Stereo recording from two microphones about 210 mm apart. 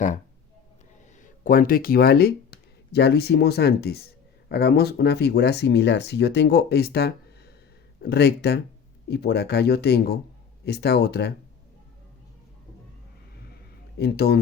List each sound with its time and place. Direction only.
1.2 s speech: 40° left (ahead or behind)
14.0 s speech: 50° left (ahead or behind)